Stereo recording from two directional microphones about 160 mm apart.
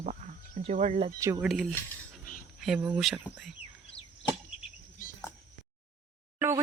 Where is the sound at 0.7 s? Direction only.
55° right (ahead or behind).